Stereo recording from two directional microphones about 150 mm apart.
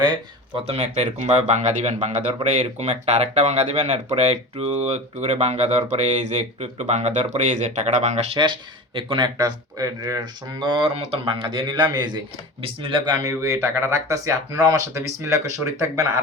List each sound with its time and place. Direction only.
0.5 s speech: 45° right (ahead or behind)
9.0 s speech: 35° right (ahead or behind)